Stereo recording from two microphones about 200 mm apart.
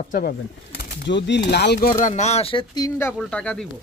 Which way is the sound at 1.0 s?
60° left (ahead or behind).